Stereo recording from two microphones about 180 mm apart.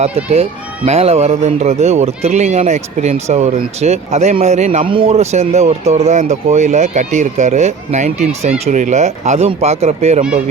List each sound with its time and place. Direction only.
0.9 s speech: 35° right (ahead or behind)